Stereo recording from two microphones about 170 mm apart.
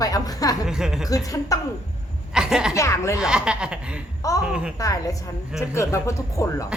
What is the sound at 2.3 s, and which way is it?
Chuckle, 5° right (ahead or behind).